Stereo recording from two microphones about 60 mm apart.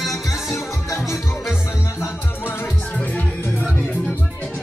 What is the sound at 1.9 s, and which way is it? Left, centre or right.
Music, left.